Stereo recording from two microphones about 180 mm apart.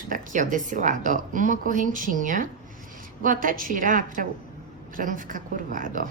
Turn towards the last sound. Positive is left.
turn(degrees=-45)  # may be behind; listen again after turning